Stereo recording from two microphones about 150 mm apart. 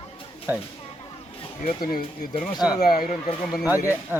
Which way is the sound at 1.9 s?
70° left (ahead or behind).